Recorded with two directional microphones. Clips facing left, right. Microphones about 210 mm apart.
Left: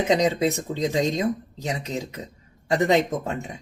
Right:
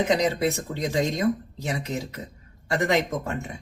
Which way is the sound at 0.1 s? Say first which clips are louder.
Left 2 dB; 20° left (ahead or behind).